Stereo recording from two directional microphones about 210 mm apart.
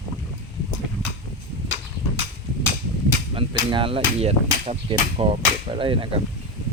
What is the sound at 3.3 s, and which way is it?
Speech, 25° right (ahead or behind).